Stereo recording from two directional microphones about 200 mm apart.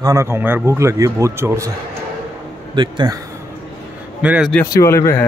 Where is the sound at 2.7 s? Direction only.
25° right (ahead or behind).